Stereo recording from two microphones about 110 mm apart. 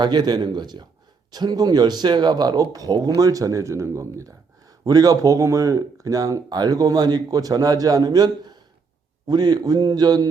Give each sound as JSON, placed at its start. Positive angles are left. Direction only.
{"t": 0.0, "sound": "speech", "side_deg": -40}